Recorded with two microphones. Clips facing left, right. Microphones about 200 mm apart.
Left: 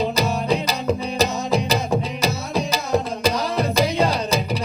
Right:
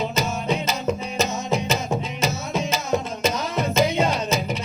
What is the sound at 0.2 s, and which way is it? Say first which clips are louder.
Music: left 3 dB; 35° left (ahead or behind).